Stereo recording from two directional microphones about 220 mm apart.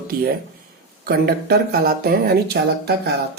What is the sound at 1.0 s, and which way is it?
Speech, 45° right (ahead or behind).